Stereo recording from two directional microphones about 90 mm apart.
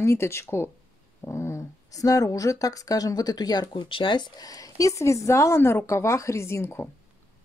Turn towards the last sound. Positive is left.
turn(degrees=30)  # may be behind; listen again after turning